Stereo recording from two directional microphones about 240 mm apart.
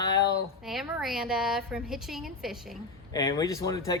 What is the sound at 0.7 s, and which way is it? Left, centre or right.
A woman's voice, centre.